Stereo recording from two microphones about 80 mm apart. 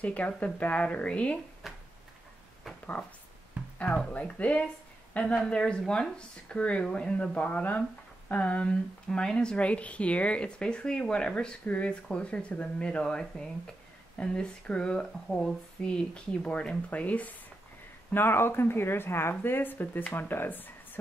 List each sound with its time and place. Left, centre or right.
0.0 s speech: centre
1.6 s a sound: centre
3.8 s speech: centre